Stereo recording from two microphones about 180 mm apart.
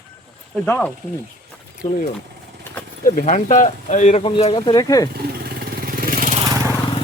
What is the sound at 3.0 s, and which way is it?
Speech, 45° left (ahead or behind).